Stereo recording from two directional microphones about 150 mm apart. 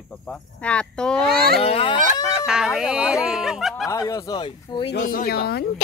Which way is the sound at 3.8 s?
25° left (ahead or behind).